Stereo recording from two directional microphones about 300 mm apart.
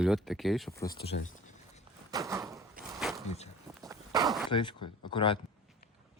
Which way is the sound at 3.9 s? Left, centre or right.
Centre.